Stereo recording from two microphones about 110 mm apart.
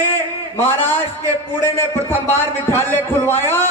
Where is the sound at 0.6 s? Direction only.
20° left (ahead or behind).